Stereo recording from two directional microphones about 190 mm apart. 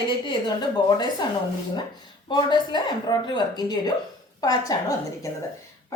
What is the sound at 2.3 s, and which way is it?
A woman's voice, 25° left (ahead or behind).